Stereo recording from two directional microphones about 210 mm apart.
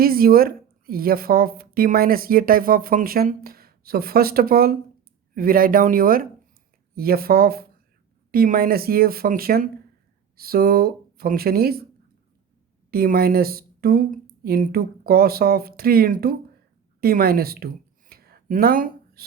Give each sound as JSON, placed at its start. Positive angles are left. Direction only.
{"t": 0.0, "sound": "speech", "side_deg": -45}
{"t": 12.9, "sound": "speech", "side_deg": -45}
{"t": 18.1, "sound": "a sound", "side_deg": -45}